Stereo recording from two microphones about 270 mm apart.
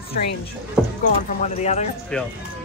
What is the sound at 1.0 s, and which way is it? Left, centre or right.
Speech, left.